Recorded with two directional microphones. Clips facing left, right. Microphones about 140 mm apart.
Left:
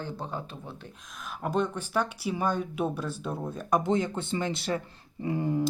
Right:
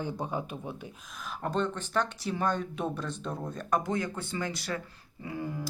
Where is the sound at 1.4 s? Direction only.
10° left (ahead or behind).